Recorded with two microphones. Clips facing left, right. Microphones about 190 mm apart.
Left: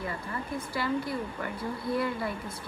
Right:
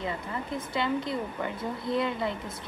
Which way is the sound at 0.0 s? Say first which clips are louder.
Right 2 dB; 20° right (ahead or behind).